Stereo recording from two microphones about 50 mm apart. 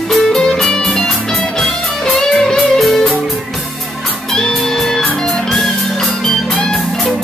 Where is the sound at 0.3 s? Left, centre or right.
Centre.